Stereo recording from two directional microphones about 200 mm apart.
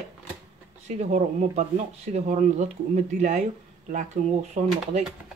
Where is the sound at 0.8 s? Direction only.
35° right (ahead or behind).